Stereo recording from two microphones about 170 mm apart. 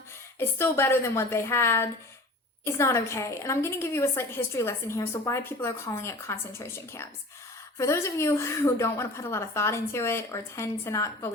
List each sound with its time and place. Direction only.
0.3 s a woman's voice: 15° left (ahead or behind)